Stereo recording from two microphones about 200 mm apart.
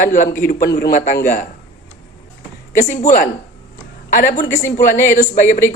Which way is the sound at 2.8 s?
35° left (ahead or behind).